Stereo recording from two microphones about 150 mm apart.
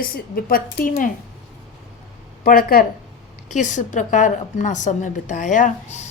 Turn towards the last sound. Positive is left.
turn(degrees=55)  # may be behind; listen again after turning